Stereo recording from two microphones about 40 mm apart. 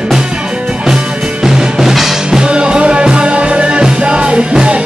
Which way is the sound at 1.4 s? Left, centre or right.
Centre.